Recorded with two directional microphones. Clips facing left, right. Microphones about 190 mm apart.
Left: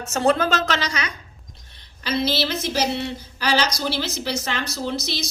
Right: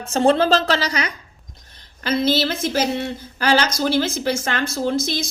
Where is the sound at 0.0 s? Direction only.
30° right (ahead or behind).